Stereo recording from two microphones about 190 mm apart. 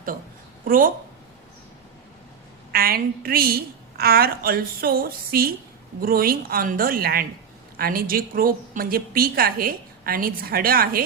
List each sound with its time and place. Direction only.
0.6 s speech: 45° right (ahead or behind)
2.7 s a woman's voice: 50° right (ahead or behind)